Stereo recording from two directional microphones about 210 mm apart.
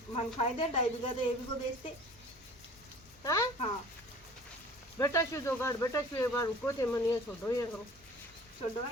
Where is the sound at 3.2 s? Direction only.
15° left (ahead or behind).